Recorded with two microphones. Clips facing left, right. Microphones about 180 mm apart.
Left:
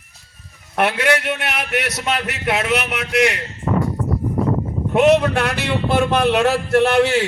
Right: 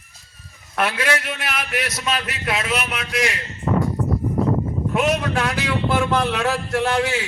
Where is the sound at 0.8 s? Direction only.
65° left (ahead or behind).